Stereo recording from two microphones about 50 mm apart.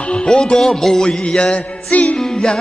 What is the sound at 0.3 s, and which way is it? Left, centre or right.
Music, centre.